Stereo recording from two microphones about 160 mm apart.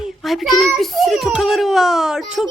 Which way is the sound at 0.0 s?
Centre (ahead or behind).